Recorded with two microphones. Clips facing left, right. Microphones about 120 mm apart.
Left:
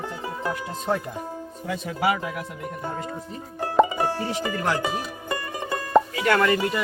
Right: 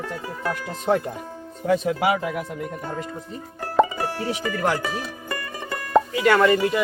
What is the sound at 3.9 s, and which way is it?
Music, 20° left (ahead or behind).